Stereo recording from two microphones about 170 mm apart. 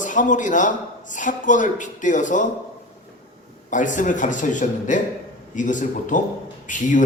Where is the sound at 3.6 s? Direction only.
50° left (ahead or behind).